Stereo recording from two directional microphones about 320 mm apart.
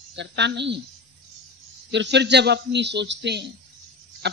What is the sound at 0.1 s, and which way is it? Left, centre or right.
Speech, right.